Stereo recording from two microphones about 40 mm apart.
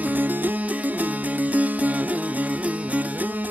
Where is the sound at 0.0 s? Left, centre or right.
Right.